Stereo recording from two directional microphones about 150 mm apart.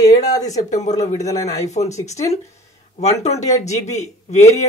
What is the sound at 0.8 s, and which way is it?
Speech, 50° left (ahead or behind).